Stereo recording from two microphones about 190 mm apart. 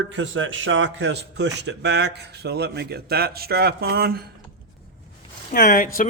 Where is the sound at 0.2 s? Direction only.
90° right; by 4.2 s 55° right (ahead or behind).